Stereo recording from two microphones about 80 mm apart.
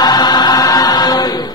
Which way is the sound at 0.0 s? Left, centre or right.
Left.